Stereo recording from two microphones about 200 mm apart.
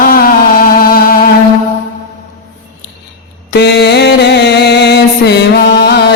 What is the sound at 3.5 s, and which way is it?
Mantra, 55° left (ahead or behind).